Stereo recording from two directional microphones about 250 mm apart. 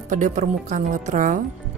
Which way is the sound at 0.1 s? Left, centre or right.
Right.